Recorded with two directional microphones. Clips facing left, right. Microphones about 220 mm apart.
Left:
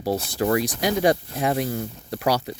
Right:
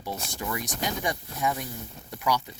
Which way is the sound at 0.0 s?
35° left (ahead or behind).